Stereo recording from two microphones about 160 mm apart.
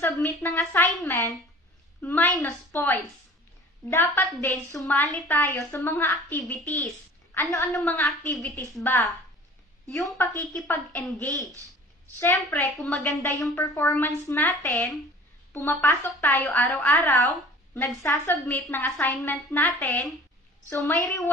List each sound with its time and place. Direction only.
0.0 s a woman's voice: 15° left (ahead or behind)
7.3 s a woman's voice: 20° left (ahead or behind)
7.7 s a woman's voice: 5° left (ahead or behind)
9.8 s a woman's voice: 5° left (ahead or behind)
13.8 s a woman's voice: 20° left (ahead or behind)
15.5 s a woman's voice: 15° left (ahead or behind)
16.9 s a woman's voice: 20° left (ahead or behind)
20.8 s a woman's voice: 20° left (ahead or behind)